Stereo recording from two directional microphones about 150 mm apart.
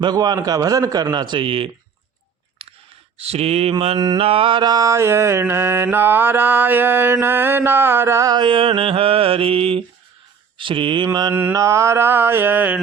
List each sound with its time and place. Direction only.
0.0 s a man's voice: 25° right (ahead or behind)
3.2 s mantra: 45° right (ahead or behind); by 12.8 s 10° right (ahead or behind)